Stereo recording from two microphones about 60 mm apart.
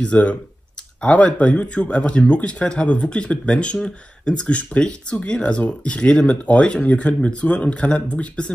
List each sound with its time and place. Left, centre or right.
0.0 s speech: left